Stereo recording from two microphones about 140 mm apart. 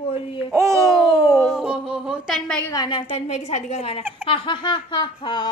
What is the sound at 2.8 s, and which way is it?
Speech, 35° left (ahead or behind).